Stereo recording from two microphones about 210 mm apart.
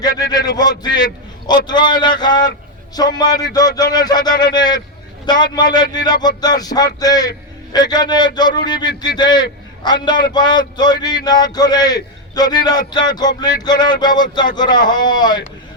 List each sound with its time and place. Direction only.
0.3 s speech: 20° left (ahead or behind)